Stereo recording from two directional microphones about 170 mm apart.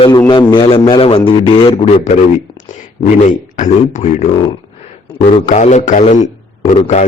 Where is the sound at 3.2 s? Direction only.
45° left (ahead or behind).